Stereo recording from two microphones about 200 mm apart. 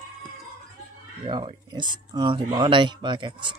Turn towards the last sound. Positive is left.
turn(degrees=-25)  # may be behind; listen again after turning